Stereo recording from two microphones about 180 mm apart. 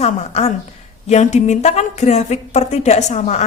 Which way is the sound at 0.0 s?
35° left (ahead or behind).